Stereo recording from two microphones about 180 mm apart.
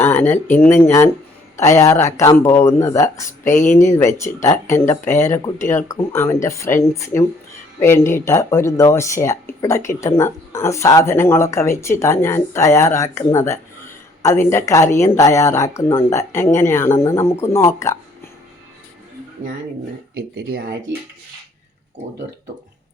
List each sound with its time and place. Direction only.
0.0 s speech: 10° left (ahead or behind)
3.4 s speech: 45° left (ahead or behind)
3.7 s speech: 15° left (ahead or behind)
20.1 s speech: 75° right (ahead or behind)